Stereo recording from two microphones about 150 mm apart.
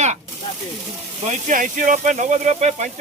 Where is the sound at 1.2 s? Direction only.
55° right (ahead or behind).